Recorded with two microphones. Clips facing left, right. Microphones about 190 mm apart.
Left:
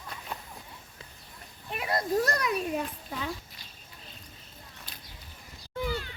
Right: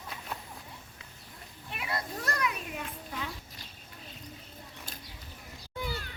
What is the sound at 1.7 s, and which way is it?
A child's voice, 40° left (ahead or behind).